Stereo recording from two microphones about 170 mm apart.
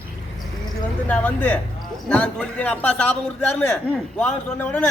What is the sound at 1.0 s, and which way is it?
A man's voice, 10° left (ahead or behind).